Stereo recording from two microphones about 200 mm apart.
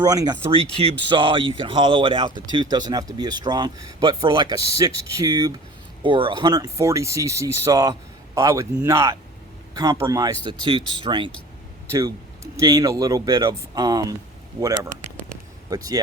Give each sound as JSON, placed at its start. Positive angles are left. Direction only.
{"t": 0.0, "sound": "speech", "side_deg": -20}
{"t": 15.7, "sound": "speech", "side_deg": -20}